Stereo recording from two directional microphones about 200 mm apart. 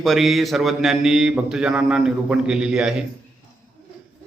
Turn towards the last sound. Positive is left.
turn(degrees=-5)  # may be behind; listen again after turning